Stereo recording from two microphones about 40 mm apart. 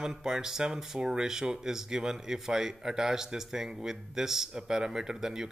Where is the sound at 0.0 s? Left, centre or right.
Centre.